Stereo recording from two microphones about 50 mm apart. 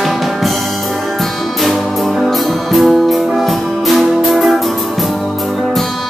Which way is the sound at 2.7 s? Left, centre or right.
Centre.